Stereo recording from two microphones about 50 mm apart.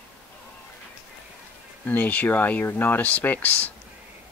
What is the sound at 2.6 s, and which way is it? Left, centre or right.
Speech, left.